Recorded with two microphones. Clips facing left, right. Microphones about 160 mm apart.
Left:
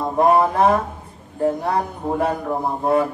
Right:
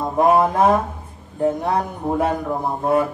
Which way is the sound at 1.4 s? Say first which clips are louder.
Right 1 dB; 20° right (ahead or behind).